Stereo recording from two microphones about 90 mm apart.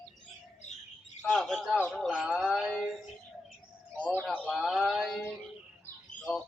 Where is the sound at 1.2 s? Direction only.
10° left (ahead or behind).